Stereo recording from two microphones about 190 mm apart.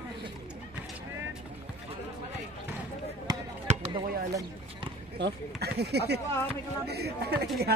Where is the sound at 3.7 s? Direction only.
40° right (ahead or behind).